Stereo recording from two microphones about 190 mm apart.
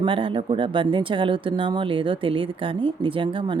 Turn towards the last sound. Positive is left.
turn(degrees=-25)  # may be behind; listen again after turning